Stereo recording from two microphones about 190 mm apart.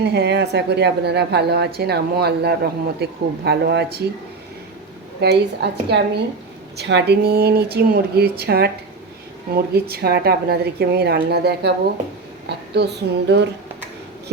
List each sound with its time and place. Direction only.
0.0 s a woman's voice: 60° right (ahead or behind)
5.2 s a woman's voice: 60° right (ahead or behind)
9.7 s a woman's voice: 55° right (ahead or behind)